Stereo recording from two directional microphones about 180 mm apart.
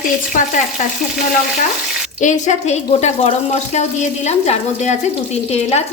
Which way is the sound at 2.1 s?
40° left (ahead or behind).